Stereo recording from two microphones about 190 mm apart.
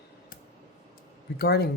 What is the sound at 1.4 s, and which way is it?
Speech, 55° left (ahead or behind).